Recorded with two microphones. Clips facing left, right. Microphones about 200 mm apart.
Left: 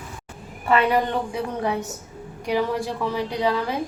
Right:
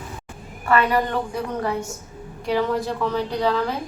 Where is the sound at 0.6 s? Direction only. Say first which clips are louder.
Even; 15° left (ahead or behind).